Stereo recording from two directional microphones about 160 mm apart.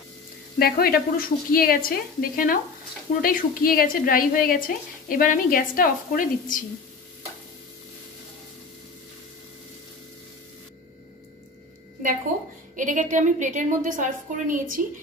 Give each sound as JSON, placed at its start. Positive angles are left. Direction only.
{"t": 0.6, "sound": "a woman's voice", "side_deg": 70}
{"t": 12.7, "sound": "a woman's voice", "side_deg": -55}